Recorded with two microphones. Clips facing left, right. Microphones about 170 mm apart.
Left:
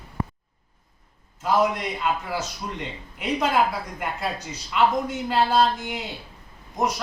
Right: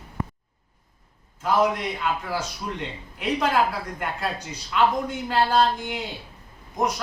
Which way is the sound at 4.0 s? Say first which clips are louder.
Even; 5° left (ahead or behind).